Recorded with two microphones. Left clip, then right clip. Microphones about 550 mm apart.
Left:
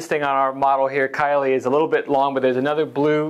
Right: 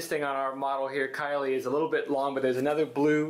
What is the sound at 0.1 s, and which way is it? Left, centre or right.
Speech, left.